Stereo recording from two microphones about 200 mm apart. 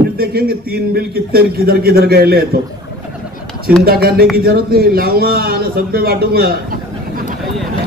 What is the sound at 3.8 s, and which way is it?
A man's voice, 50° right (ahead or behind).